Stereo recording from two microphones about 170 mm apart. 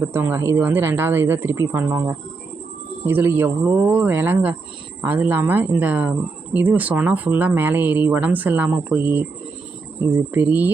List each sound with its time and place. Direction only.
0.0 s speech: 15° right (ahead or behind)